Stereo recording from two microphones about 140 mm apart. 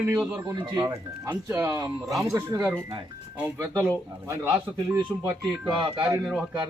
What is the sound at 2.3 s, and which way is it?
Speech, 20° right (ahead or behind).